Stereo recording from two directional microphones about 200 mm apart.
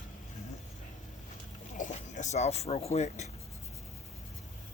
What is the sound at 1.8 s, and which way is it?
Speech, 35° left (ahead or behind).